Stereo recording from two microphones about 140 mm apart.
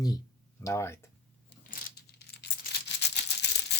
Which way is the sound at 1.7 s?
80° left.